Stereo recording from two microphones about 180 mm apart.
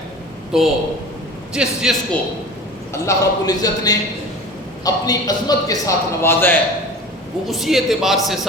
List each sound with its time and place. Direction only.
0.5 s a man's voice: 5° right (ahead or behind)
2.9 s a man's voice: 20° left (ahead or behind)
7.4 s a man's voice: centre (ahead or behind)